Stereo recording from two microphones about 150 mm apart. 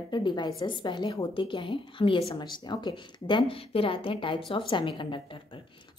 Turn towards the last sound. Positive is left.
turn(degrees=35)  # may be behind; listen again after turning